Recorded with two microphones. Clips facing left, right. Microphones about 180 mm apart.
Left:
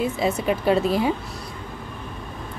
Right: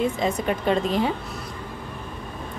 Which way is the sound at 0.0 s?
5° left (ahead or behind).